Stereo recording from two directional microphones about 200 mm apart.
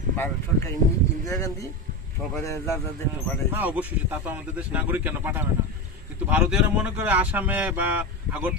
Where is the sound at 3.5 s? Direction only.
10° right (ahead or behind).